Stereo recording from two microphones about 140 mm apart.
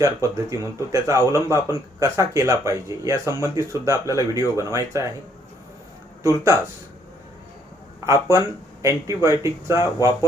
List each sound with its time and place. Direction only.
0.0 s speech: 20° right (ahead or behind)
8.0 s speech: 20° right (ahead or behind)